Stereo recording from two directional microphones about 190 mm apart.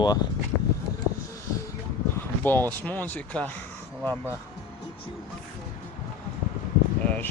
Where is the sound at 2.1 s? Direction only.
10° left (ahead or behind).